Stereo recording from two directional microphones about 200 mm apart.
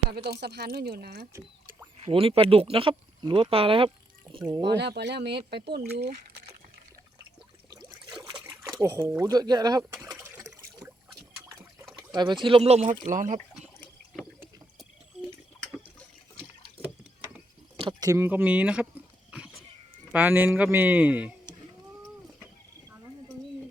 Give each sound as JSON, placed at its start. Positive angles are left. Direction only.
{"t": 0.3, "sound": "speech", "side_deg": -55}
{"t": 1.3, "sound": "a sound", "side_deg": -15}
{"t": 2.0, "sound": "speech", "side_deg": -30}
{"t": 4.8, "sound": "speech", "side_deg": -60}
{"t": 8.8, "sound": "speech", "side_deg": -15}
{"t": 12.0, "sound": "speech", "side_deg": -20}
{"t": 13.1, "sound": "speech", "side_deg": -40}
{"t": 14.3, "sound": "rowboat", "side_deg": -10}
{"t": 17.7, "sound": "speech", "side_deg": -20}
{"t": 19.3, "sound": "cat", "side_deg": -5}
{"t": 20.1, "sound": "speech", "side_deg": -10}